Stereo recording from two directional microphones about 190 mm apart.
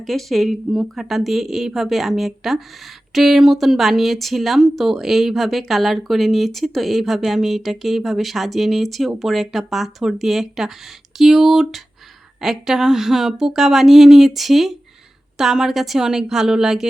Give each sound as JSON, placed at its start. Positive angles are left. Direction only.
{"t": 0.0, "sound": "speech", "side_deg": 0}